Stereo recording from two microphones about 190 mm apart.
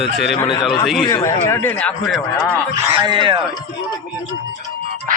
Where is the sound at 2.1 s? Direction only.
Centre (ahead or behind).